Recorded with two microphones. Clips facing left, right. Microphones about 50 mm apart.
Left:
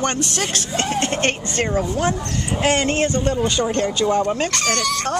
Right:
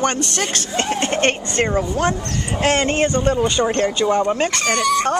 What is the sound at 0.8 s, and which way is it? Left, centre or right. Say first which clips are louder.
Speech: right 2 dB; centre.